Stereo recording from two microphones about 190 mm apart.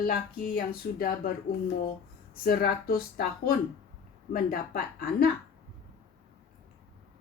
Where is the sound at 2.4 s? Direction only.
55° left (ahead or behind).